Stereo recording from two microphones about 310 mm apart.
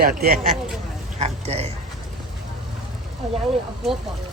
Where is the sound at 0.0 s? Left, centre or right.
Right.